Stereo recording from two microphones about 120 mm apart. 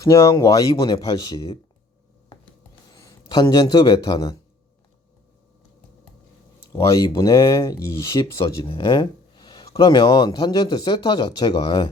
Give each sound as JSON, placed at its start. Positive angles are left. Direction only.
{"t": 0.0, "sound": "speech", "side_deg": 25}
{"t": 2.9, "sound": "a sound", "side_deg": 35}
{"t": 3.5, "sound": "speech", "side_deg": 45}
{"t": 6.7, "sound": "speech", "side_deg": 30}
{"t": 8.6, "sound": "speech", "side_deg": 45}